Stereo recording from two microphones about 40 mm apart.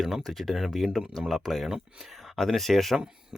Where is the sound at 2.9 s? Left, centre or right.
Centre.